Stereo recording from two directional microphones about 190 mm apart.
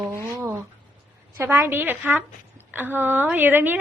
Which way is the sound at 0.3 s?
15° right (ahead or behind).